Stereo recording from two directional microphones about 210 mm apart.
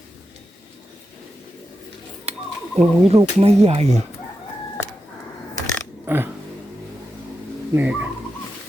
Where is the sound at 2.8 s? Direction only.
30° right (ahead or behind).